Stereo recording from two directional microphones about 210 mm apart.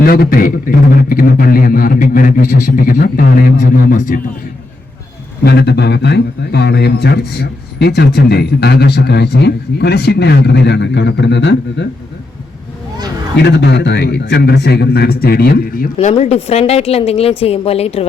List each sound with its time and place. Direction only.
0.0 s a man's voice: 45° left (ahead or behind)
5.4 s a man's voice: 50° left (ahead or behind)
13.3 s a man's voice: 50° left (ahead or behind)
16.0 s a woman's voice: 30° left (ahead or behind)